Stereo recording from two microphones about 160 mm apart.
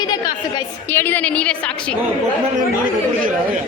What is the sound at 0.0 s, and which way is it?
Chatter, 25° left (ahead or behind).